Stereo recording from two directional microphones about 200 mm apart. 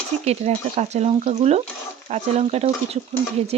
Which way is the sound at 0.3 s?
35° right (ahead or behind).